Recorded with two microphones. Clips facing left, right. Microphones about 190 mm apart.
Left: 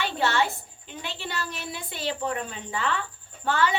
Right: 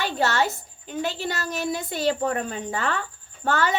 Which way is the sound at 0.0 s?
40° right (ahead or behind).